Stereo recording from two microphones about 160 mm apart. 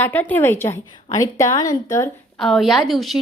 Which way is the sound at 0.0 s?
10° left (ahead or behind).